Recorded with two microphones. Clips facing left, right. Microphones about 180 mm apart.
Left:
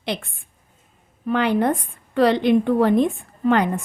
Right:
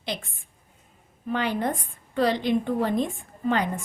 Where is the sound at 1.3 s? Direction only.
65° left (ahead or behind).